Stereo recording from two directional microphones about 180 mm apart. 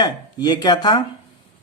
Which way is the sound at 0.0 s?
20° left (ahead or behind).